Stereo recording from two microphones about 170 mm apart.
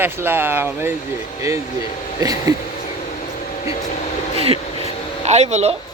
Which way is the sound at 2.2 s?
20° right (ahead or behind).